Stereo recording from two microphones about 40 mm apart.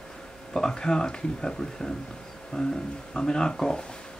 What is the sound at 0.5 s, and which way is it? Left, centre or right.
Speech, centre.